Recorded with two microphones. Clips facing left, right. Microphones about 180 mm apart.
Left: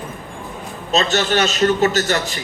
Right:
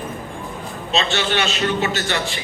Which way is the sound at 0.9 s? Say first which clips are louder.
Left 4 dB; 40° left (ahead or behind).